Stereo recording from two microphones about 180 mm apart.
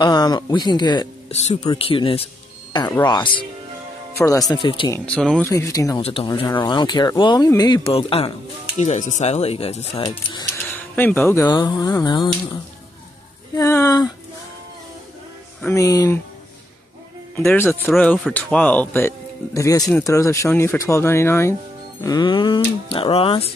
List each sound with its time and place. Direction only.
0.0 s speech: 25° left (ahead or behind)
1.3 s speech: 35° left (ahead or behind)
4.9 s speech: 5° left (ahead or behind)
5.5 s speech: 20° left (ahead or behind)
5.9 s speech: 30° left (ahead or behind)
10.6 s speech: 10° left (ahead or behind)
13.6 s speech: 20° left (ahead or behind)
15.6 s speech: 15° left (ahead or behind)
17.4 s speech: 10° left (ahead or behind); by 23.5 s 30° left (ahead or behind)